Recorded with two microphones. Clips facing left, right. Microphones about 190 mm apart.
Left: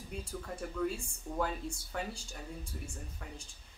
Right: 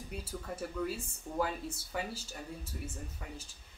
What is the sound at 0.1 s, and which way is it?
Speech, 5° right (ahead or behind).